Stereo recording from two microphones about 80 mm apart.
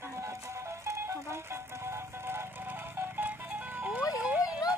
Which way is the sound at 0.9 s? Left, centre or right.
Right.